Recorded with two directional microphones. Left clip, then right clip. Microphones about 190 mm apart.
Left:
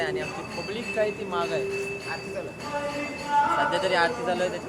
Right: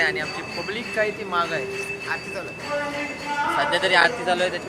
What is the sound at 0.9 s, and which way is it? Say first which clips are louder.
Speech: right 4 dB; centre (ahead or behind).